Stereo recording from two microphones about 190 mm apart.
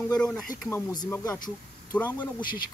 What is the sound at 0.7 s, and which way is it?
Speech, 20° left (ahead or behind).